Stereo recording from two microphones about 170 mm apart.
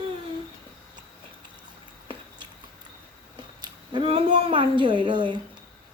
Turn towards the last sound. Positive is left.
turn(degrees=-25)  # may be behind; listen again after turning